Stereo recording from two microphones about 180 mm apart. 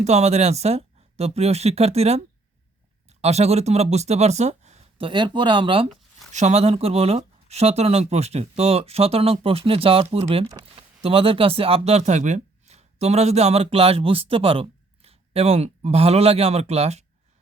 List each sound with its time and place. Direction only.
0.0 s speech: 35° right (ahead or behind)